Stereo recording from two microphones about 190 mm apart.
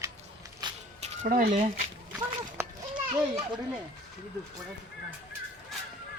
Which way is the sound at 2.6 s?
15° right (ahead or behind).